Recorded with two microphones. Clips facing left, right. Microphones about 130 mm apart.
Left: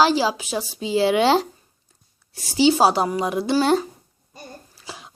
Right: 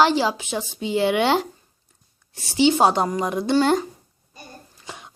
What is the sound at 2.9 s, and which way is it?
Speech, 10° left (ahead or behind).